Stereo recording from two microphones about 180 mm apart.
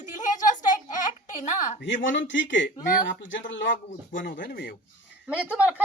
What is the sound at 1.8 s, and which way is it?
Speech, 90° left.